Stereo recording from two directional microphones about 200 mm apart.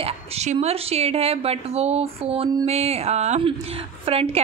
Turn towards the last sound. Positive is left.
turn(degrees=-30)  # may be behind; listen again after turning